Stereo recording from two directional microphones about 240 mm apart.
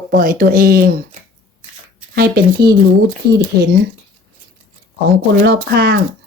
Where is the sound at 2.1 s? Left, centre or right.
Right.